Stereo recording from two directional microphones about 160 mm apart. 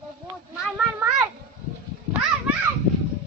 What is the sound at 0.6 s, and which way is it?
Children playing, 5° right (ahead or behind).